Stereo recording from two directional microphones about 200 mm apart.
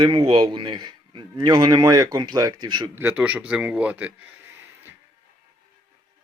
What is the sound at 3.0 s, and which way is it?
A man's voice, 10° right (ahead or behind).